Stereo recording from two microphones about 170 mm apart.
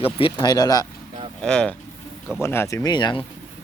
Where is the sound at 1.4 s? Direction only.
5° left (ahead or behind).